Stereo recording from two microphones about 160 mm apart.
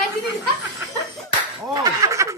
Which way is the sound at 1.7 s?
20° right (ahead or behind).